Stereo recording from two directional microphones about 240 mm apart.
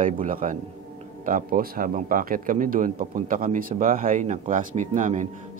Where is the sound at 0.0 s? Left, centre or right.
Right.